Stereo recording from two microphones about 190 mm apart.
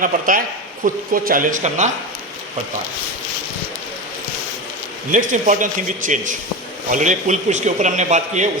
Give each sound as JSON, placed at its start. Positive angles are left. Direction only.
{"t": 0.0, "sound": "a man's voice", "side_deg": -45}
{"t": 5.1, "sound": "a man's voice", "side_deg": -45}